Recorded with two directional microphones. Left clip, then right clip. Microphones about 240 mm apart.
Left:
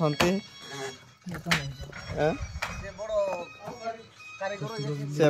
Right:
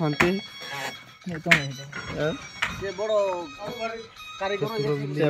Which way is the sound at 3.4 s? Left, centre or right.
Right.